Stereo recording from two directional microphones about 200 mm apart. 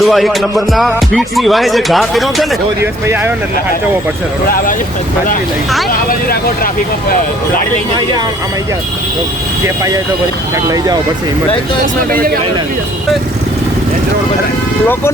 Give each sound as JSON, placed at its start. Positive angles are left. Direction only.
{"t": 0.0, "sound": "speech", "side_deg": 0}
{"t": 2.8, "sound": "speech", "side_deg": -10}
{"t": 4.4, "sound": "speech", "side_deg": 45}
{"t": 5.9, "sound": "speech", "side_deg": 45}
{"t": 9.6, "sound": "speech", "side_deg": -15}
{"t": 12.1, "sound": "speech", "side_deg": -45}